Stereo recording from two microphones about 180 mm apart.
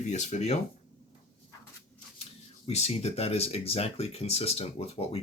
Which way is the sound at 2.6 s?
35° left (ahead or behind).